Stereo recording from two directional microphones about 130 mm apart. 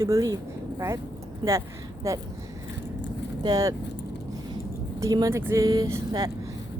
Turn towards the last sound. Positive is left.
turn(degrees=-30)  # may be behind; listen again after turning